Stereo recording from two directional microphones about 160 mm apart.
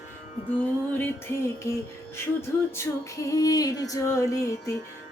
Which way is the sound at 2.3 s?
15° left (ahead or behind).